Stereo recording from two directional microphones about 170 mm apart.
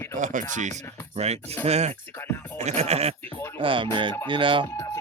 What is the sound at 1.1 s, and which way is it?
Speech, 40° right (ahead or behind).